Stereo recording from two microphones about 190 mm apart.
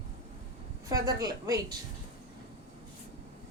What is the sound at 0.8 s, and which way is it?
Speech, 20° right (ahead or behind).